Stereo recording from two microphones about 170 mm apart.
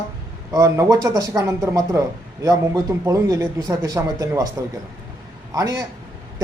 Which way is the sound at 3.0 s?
20° right (ahead or behind).